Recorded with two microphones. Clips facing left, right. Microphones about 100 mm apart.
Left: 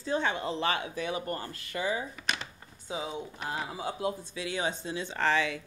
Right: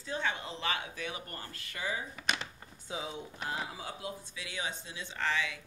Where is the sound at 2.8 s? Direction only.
10° left (ahead or behind).